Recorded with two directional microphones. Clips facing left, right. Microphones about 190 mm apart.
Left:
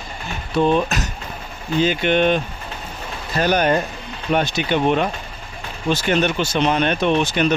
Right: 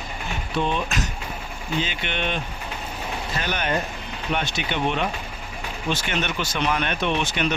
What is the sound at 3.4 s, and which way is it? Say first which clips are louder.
Speech: left 10 dB; 40° left (ahead or behind).